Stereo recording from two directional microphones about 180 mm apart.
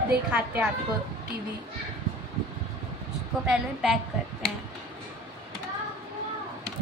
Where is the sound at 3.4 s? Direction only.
5° right (ahead or behind).